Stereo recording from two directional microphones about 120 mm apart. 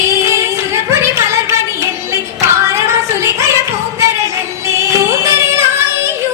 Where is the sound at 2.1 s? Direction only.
25° right (ahead or behind).